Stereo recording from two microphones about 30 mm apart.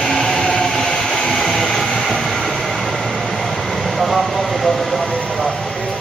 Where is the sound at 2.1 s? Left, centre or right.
Centre.